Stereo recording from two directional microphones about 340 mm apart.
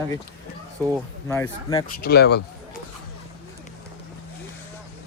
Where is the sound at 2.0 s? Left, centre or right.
Left.